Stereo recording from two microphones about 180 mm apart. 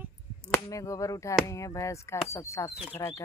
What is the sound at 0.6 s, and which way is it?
Speech, 20° left (ahead or behind).